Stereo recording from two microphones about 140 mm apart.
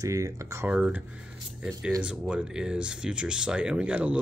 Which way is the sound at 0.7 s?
10° right (ahead or behind).